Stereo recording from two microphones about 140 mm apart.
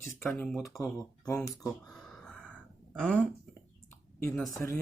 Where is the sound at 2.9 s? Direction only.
10° left (ahead or behind).